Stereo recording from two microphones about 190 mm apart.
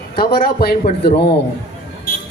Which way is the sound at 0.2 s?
50° left (ahead or behind).